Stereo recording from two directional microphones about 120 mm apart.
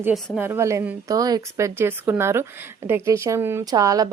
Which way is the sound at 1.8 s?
15° right (ahead or behind).